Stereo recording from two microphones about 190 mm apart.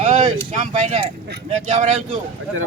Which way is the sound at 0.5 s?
40° right (ahead or behind).